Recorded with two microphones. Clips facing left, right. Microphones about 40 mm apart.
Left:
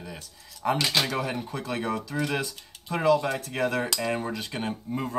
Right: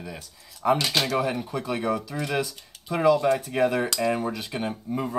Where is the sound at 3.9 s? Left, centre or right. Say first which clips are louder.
Right 3 dB; centre.